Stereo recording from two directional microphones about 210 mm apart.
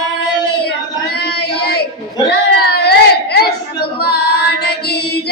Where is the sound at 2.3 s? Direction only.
50° left (ahead or behind).